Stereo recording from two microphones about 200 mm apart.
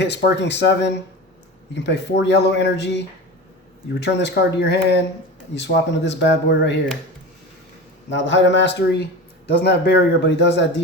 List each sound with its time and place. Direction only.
0.0 s speech: 60° left (ahead or behind)
4.0 s speech: 60° left (ahead or behind)
8.1 s speech: 65° left (ahead or behind)